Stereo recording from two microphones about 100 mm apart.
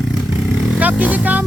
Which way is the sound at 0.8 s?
15° right (ahead or behind).